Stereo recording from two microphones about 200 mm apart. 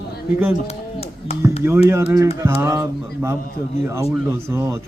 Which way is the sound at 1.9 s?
15° right (ahead or behind).